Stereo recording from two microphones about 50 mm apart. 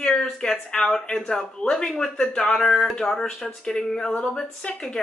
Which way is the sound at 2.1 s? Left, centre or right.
Left.